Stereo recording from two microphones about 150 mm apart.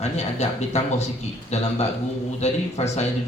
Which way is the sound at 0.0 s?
45° left (ahead or behind).